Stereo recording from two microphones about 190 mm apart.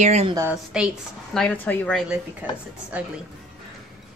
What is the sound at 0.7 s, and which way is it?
A woman's voice, 5° right (ahead or behind).